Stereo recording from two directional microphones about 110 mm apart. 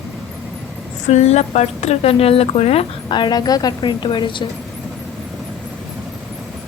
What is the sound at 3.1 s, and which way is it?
A woman's voice, 40° left (ahead or behind).